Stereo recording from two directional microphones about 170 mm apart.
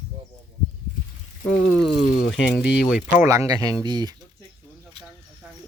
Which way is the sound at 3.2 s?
20° right (ahead or behind).